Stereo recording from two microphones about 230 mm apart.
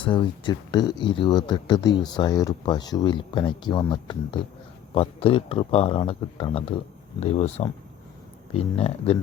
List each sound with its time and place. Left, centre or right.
0.0 s speech: left